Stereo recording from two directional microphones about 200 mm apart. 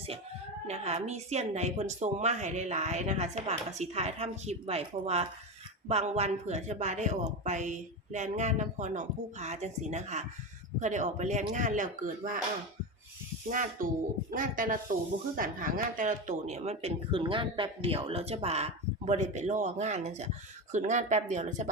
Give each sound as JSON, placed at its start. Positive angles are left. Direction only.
{"t": 0.7, "sound": "speech", "side_deg": -35}
{"t": 13.5, "sound": "speech", "side_deg": -40}